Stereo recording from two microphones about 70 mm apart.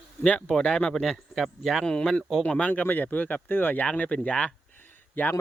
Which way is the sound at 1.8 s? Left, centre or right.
Centre.